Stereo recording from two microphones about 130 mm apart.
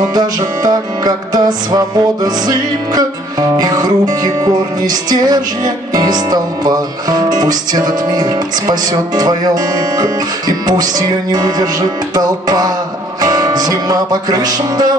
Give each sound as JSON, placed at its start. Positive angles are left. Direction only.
{"t": 0.1, "sound": "music", "side_deg": -30}